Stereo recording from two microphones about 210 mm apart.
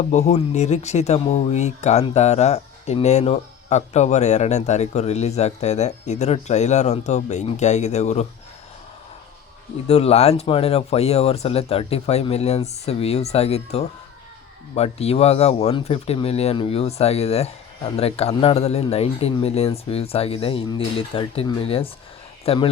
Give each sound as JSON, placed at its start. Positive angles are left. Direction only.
{"t": 0.1, "sound": "speech", "side_deg": 35}
{"t": 9.8, "sound": "speech", "side_deg": 30}